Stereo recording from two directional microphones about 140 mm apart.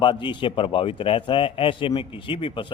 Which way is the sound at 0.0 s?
35° left (ahead or behind).